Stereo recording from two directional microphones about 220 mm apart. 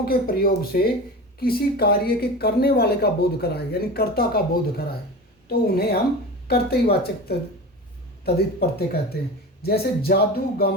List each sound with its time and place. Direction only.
0.0 s speech: 45° left (ahead or behind)